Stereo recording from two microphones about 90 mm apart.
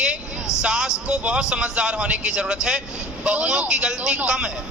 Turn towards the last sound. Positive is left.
turn(degrees=-10)  # may be behind; listen again after turning